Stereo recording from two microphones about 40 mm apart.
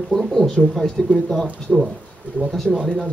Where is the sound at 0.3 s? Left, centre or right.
Centre.